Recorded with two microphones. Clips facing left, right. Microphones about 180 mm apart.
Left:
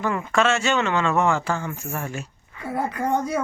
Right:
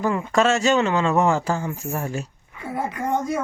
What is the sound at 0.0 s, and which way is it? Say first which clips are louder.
Speech: right 2 dB; 30° right (ahead or behind).